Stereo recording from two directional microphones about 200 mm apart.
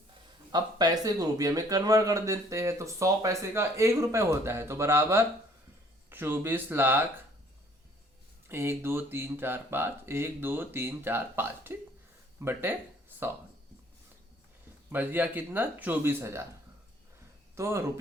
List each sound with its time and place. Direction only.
0.5 s speech: 20° right (ahead or behind)
8.4 s speech: 10° right (ahead or behind)
14.9 s speech: 10° right (ahead or behind)
17.5 s speech: 15° right (ahead or behind)